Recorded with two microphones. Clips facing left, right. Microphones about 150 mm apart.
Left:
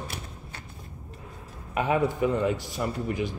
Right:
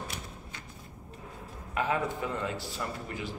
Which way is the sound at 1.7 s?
15° left (ahead or behind).